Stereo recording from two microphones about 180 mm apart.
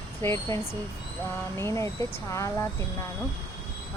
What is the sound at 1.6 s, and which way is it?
Speech, 15° left (ahead or behind).